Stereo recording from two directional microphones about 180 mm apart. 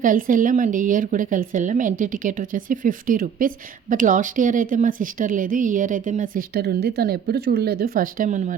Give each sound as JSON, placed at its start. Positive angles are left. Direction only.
{"t": 0.0, "sound": "a woman's voice", "side_deg": -50}